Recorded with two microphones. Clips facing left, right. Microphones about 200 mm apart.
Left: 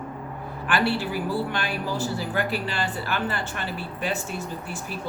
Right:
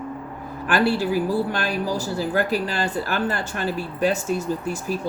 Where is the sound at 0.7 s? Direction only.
40° right (ahead or behind).